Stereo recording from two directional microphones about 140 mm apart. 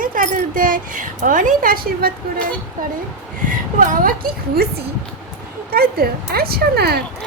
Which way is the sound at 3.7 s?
75° right (ahead or behind).